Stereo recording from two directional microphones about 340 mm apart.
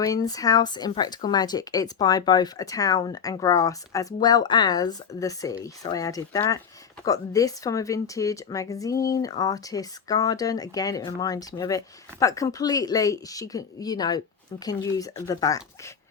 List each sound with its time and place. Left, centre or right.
0.0 s speech: centre